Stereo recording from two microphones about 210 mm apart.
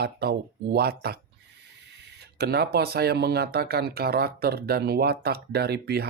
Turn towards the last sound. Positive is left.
turn(degrees=-50)  # may be behind; listen again after turning